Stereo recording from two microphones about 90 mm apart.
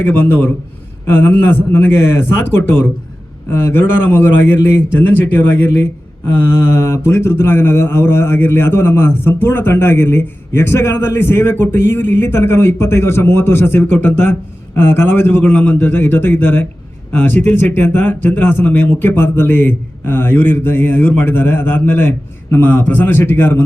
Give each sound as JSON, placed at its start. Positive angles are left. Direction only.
{"t": 0.0, "sound": "speech", "side_deg": 25}